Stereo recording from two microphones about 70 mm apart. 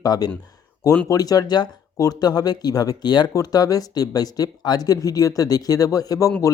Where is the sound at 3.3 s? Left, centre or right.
Left.